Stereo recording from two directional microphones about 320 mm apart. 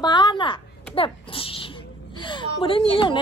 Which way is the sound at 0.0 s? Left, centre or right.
Centre.